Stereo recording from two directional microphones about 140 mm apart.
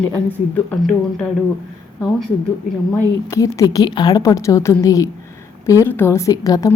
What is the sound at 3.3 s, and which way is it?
Speech, 25° left (ahead or behind).